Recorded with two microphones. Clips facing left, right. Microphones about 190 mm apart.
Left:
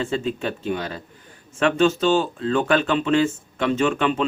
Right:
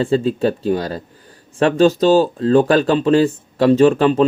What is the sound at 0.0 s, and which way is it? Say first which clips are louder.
Speech: right 8 dB; 35° right (ahead or behind).